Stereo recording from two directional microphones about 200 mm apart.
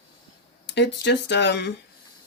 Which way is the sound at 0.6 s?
60° left (ahead or behind).